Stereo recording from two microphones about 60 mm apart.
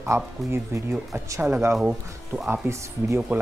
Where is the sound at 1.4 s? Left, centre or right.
Right.